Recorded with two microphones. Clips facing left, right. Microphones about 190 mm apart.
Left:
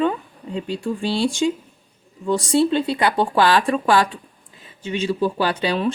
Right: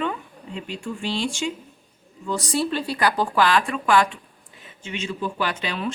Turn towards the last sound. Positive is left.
turn(degrees=35)  # may be behind; listen again after turning